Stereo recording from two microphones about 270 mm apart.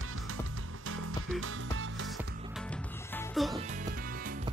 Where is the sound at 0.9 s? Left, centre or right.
Right.